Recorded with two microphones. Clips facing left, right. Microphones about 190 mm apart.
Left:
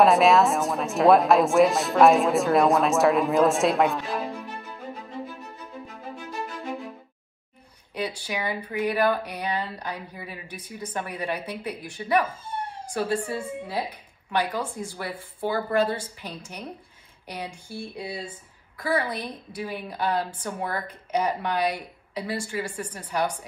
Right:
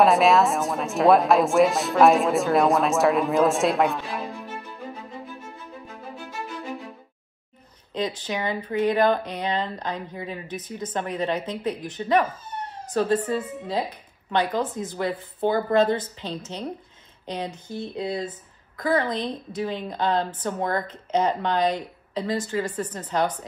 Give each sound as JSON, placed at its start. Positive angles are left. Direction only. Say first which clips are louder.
{"t": 0.0, "sound": "a woman's voice", "louder": "even", "side_deg": 0}
{"t": 7.9, "sound": "a woman's voice", "louder": "right 3 dB", "side_deg": 10}